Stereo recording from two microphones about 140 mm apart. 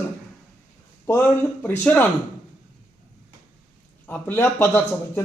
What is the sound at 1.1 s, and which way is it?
Speech, 10° left (ahead or behind).